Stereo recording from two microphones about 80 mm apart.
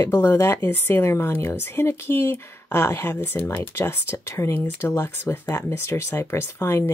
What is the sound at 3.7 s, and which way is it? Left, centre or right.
Speech, left.